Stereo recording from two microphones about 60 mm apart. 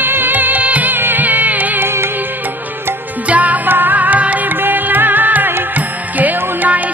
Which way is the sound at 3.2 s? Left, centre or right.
Right.